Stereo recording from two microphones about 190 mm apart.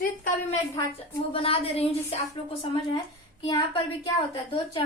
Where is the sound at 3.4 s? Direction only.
20° left (ahead or behind).